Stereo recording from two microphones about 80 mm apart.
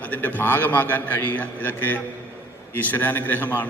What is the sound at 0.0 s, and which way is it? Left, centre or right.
A man's voice, left.